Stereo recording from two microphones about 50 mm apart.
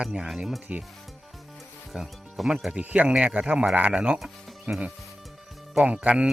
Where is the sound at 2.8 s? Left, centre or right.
Right.